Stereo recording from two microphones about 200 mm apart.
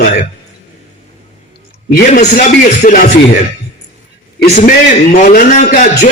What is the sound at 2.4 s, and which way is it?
A man's voice, 40° left (ahead or behind).